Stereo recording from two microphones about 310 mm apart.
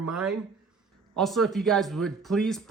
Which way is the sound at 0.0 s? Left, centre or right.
Centre.